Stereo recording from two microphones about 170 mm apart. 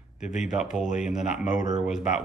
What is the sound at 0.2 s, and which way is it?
Speech, 45° left (ahead or behind).